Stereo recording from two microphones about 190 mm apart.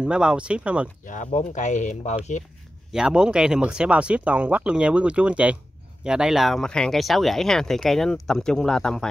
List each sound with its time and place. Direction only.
0.0 s speech: 5° right (ahead or behind)
1.0 s speech: 40° left (ahead or behind)
2.9 s speech: 5° right (ahead or behind)